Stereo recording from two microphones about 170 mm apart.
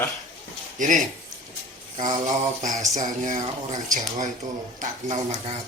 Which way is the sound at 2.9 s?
45° right (ahead or behind).